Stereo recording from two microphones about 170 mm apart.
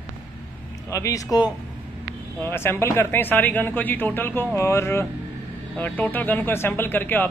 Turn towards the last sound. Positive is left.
turn(degrees=10)  # may be behind; listen again after turning